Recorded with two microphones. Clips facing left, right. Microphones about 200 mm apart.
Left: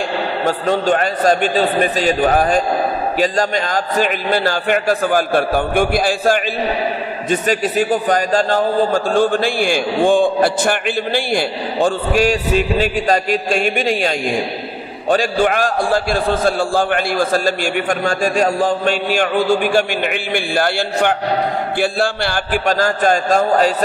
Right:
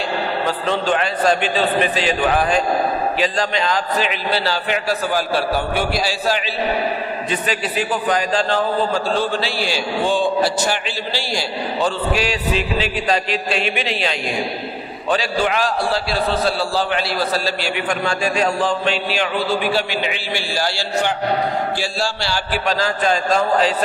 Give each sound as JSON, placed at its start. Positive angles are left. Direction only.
{"t": 0.5, "sound": "a man's voice", "side_deg": 45}